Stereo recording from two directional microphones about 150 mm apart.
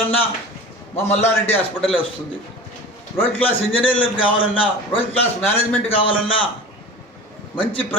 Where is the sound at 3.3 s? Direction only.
35° left (ahead or behind).